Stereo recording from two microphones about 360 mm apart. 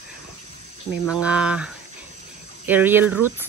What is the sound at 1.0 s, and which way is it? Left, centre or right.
Cricket, centre.